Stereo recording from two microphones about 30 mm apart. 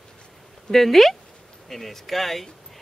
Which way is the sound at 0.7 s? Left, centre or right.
Centre.